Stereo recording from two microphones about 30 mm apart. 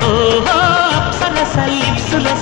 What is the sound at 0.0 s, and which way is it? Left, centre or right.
Music, right.